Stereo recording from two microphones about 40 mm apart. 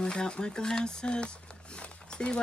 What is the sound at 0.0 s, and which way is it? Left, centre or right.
Speech, left.